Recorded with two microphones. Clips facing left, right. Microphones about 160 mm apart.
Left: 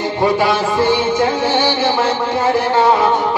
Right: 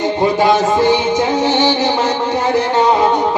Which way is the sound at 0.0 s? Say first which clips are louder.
Right 2 dB; 20° right (ahead or behind).